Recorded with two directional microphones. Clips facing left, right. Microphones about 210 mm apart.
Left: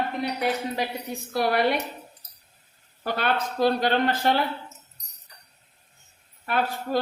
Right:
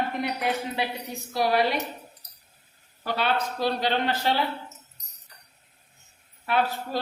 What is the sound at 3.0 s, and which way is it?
Speech, 50° left (ahead or behind).